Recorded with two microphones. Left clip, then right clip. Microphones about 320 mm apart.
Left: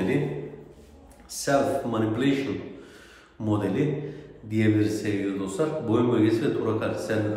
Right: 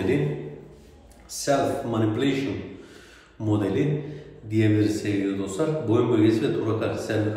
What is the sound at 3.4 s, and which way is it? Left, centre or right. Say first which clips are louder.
A man's voice: right 1 dB; centre.